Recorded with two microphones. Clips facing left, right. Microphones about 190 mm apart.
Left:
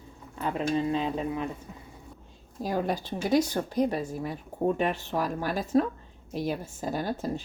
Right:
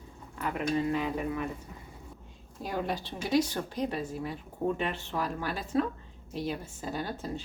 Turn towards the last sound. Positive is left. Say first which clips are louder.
# left 4 dB
turn(degrees=45)  # may be behind; listen again after turning